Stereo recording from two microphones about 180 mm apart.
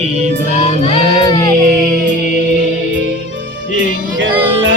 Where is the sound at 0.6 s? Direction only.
30° left (ahead or behind).